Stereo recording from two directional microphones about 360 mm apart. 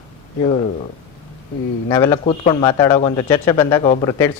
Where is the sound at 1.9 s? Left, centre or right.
Centre.